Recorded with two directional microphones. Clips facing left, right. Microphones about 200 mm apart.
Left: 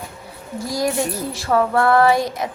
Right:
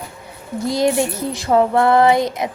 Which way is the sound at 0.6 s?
25° right (ahead or behind).